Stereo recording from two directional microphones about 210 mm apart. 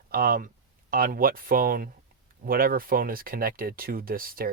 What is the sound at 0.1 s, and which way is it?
Speech, 45° right (ahead or behind).